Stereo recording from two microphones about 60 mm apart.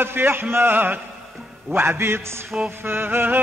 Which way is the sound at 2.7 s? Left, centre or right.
Right.